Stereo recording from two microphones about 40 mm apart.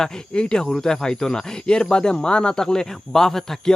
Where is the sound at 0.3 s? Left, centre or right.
Left.